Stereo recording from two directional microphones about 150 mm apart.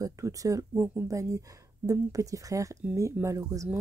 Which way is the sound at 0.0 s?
20° right (ahead or behind).